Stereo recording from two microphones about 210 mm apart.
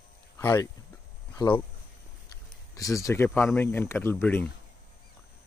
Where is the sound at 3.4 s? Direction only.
10° left (ahead or behind).